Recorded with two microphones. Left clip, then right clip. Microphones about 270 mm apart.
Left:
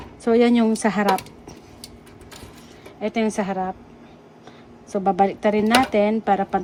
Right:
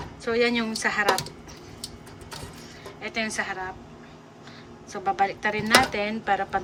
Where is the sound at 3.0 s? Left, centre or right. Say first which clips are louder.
Left 5 dB; centre.